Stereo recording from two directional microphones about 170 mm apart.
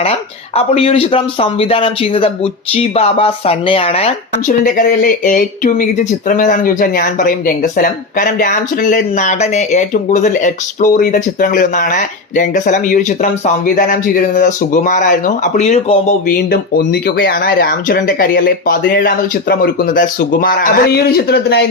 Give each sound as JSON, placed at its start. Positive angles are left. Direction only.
{"t": 0.5, "sound": "a man's voice", "side_deg": 35}
{"t": 16.5, "sound": "speech", "side_deg": 65}